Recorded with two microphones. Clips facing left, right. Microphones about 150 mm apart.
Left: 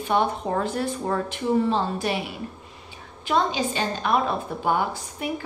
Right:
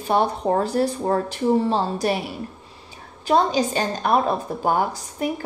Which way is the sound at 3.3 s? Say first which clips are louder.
Right 4 dB; 40° right (ahead or behind).